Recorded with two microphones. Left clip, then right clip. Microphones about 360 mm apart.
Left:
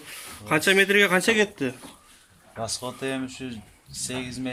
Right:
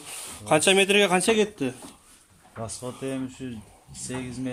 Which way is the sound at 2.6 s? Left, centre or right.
Left.